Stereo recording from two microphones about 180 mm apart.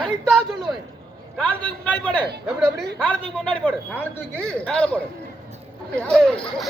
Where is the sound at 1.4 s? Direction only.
5° left (ahead or behind).